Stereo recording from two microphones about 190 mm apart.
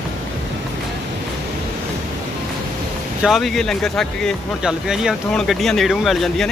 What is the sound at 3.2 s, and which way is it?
Speech, centre (ahead or behind).